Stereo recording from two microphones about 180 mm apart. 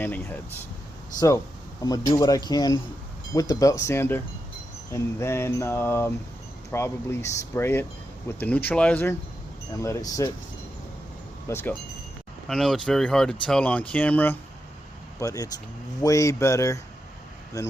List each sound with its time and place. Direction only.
0.0 s wind chime: 10° left (ahead or behind)
1.8 s speech: 20° left (ahead or behind)
3.3 s wind chime: 20° left (ahead or behind)
11.4 s speech: 15° left (ahead or behind)
12.5 s speech: centre (ahead or behind); by 15.4 s 20° left (ahead or behind)
16.0 s wind chime: 20° left (ahead or behind)